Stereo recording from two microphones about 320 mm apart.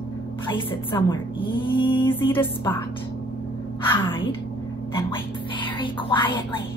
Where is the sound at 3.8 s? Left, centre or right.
Centre.